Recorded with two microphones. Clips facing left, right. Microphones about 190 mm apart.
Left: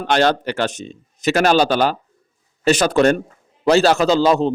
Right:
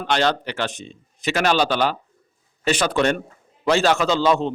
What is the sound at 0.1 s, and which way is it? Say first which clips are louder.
Speech: left 4 dB; 45° left (ahead or behind).